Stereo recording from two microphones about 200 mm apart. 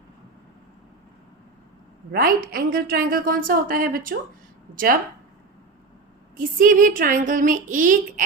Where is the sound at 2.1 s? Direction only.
45° right (ahead or behind).